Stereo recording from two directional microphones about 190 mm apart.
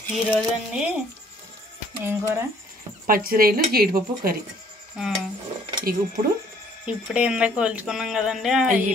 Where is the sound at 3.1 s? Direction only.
50° right (ahead or behind).